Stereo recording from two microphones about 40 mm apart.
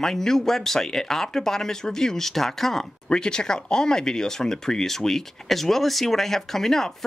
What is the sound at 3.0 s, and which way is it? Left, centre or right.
Speech, left.